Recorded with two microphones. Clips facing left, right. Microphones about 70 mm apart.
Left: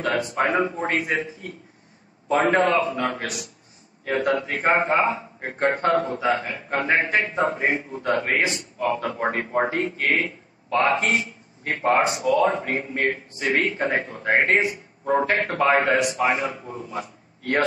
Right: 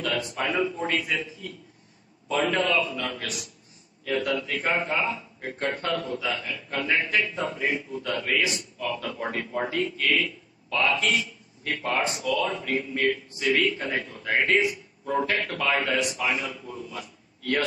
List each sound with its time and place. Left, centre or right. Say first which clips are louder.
0.0 s a man's voice: left 6 dB; left